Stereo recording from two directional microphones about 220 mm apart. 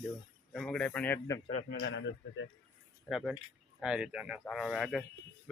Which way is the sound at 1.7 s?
50° left (ahead or behind).